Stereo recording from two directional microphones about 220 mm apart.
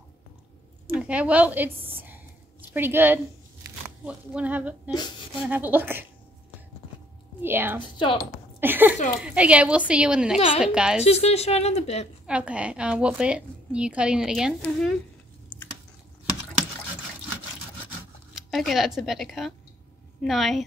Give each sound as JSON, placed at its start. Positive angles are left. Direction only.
{"t": 0.8, "sound": "a woman's voice", "side_deg": -5}
{"t": 7.4, "sound": "a woman's voice", "side_deg": -10}
{"t": 7.8, "sound": "speech", "side_deg": 20}
{"t": 8.5, "sound": "a woman's voice", "side_deg": -10}
{"t": 11.1, "sound": "speech", "side_deg": 30}
{"t": 12.3, "sound": "a woman's voice", "side_deg": -5}
{"t": 18.3, "sound": "a woman's voice", "side_deg": 0}